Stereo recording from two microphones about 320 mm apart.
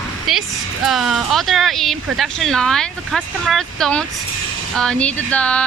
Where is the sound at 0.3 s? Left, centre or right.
Centre.